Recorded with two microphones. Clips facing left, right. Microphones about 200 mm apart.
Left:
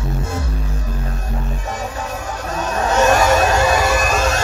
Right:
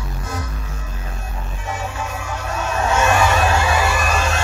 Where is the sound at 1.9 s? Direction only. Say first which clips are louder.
Left 2 dB; 40° left (ahead or behind).